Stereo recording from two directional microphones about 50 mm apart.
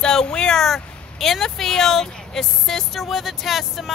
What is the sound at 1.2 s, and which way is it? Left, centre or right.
Speech, centre.